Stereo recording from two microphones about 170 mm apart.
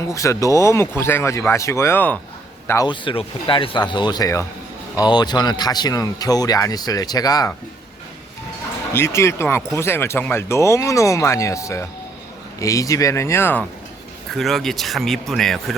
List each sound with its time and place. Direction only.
0.1 s speech: 20° left (ahead or behind)
2.8 s speech: 30° left (ahead or behind)
8.9 s speech: 15° left (ahead or behind)
14.3 s speech: centre (ahead or behind)